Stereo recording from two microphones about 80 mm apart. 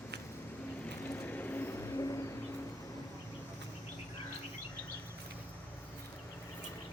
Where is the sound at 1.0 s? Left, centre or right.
Left.